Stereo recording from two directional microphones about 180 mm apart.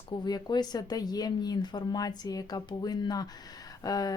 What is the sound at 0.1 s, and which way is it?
Speech, 25° left (ahead or behind).